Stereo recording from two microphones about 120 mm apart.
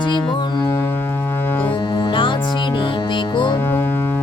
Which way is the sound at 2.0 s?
45° left (ahead or behind).